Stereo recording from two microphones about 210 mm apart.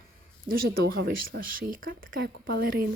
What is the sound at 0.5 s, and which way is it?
A woman's voice, 45° right (ahead or behind).